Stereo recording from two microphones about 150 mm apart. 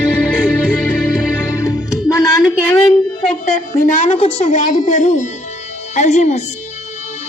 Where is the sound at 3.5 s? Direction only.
55° left (ahead or behind).